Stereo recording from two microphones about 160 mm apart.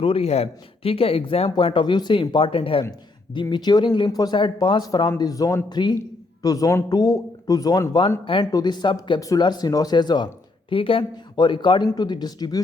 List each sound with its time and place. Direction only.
0.0 s speech: 35° left (ahead or behind)